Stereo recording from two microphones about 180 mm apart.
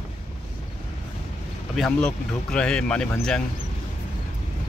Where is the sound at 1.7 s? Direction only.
Centre (ahead or behind).